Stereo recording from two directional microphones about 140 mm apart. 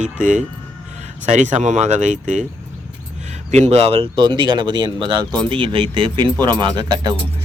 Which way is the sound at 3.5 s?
50° right (ahead or behind).